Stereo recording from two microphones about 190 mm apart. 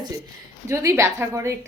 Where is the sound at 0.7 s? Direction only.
15° right (ahead or behind).